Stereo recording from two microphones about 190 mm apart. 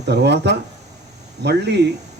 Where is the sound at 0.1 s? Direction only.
60° right (ahead or behind).